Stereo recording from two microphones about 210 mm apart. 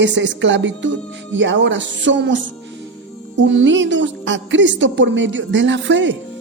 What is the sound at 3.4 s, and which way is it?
A man's voice, 60° right (ahead or behind).